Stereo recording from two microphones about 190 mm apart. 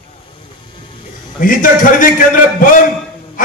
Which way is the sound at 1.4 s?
45° left (ahead or behind).